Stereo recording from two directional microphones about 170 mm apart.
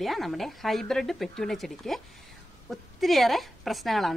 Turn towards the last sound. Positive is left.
turn(degrees=0)  # may be behind; listen again after turning